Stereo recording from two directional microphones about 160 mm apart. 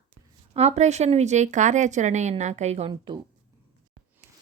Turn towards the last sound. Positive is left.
turn(degrees=-30)  # may be behind; listen again after turning